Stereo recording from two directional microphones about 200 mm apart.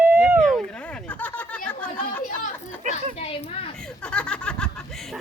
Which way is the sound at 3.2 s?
30° left (ahead or behind).